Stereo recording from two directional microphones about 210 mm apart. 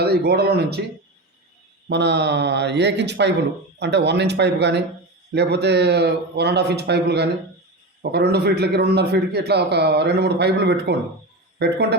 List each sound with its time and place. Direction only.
0.0 s a man's voice: 50° right (ahead or behind)
1.9 s a man's voice: 55° right (ahead or behind)